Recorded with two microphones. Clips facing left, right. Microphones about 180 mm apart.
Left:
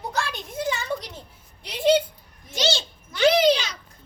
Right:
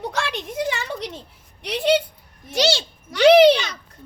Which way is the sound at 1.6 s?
70° right (ahead or behind).